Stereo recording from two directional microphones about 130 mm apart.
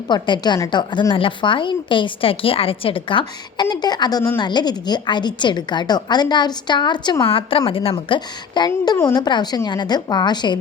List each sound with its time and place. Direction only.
0.1 s a woman's voice: 35° left (ahead or behind)
9.0 s a woman's voice: 20° left (ahead or behind)
9.2 s a woman's voice: 30° left (ahead or behind)